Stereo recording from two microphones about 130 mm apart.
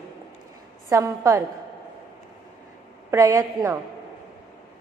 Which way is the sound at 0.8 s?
25° right (ahead or behind).